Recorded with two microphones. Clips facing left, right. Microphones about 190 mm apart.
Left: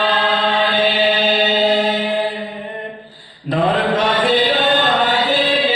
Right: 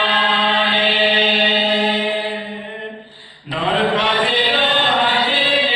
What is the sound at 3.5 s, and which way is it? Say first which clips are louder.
Chant: left 2 dB; 45° left (ahead or behind).